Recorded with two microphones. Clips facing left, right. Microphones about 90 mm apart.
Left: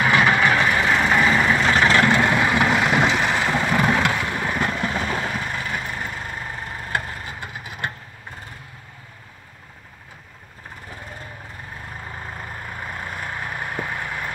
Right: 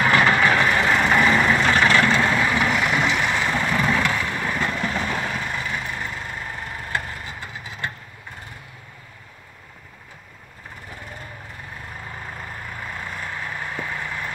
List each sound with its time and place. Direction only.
0.0 s vehicle: 15° left (ahead or behind)
1.9 s vehicle: 20° left (ahead or behind)
12.2 s vehicle: 10° left (ahead or behind)